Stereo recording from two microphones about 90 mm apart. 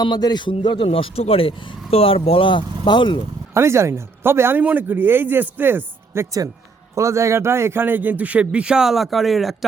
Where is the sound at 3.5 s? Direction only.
30° right (ahead or behind).